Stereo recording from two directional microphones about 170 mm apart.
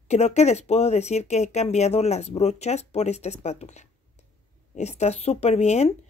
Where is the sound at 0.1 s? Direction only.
40° left (ahead or behind).